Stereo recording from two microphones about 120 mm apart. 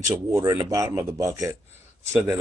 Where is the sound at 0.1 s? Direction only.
25° right (ahead or behind).